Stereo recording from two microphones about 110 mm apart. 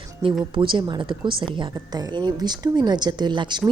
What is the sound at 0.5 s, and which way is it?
Speech, 50° right (ahead or behind).